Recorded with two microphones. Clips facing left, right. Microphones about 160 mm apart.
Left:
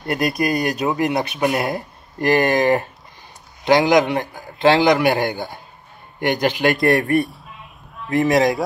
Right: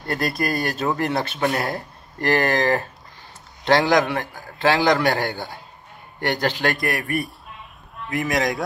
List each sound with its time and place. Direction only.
0.0 s a man's voice: 20° left (ahead or behind)
7.2 s a sound: centre (ahead or behind)
8.1 s speech: 25° left (ahead or behind)